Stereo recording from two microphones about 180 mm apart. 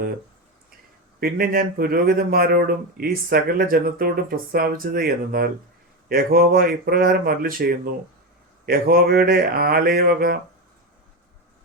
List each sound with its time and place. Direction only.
1.2 s speech: 55° right (ahead or behind)